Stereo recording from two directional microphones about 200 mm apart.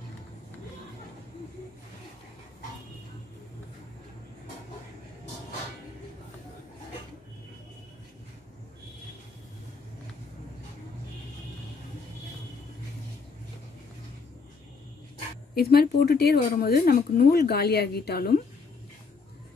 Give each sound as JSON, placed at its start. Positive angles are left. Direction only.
{"t": 15.5, "sound": "speech", "side_deg": 50}